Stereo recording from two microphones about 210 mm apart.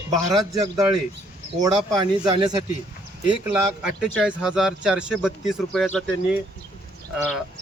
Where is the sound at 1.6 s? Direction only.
20° right (ahead or behind).